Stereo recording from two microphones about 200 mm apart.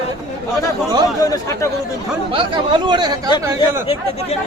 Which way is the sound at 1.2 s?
15° left (ahead or behind).